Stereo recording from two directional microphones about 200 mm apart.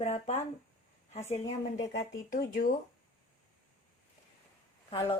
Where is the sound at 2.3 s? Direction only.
45° left (ahead or behind).